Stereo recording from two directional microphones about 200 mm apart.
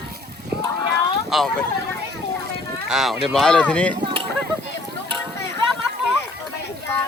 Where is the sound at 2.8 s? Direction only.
Centre (ahead or behind).